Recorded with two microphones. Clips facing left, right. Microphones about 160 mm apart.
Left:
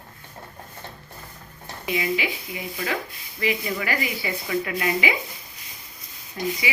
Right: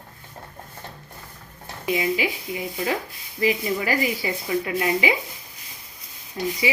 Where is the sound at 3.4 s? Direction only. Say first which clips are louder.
Right 3 dB; 35° right (ahead or behind).